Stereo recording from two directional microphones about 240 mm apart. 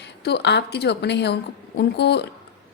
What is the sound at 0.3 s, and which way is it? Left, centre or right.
A woman's voice, left.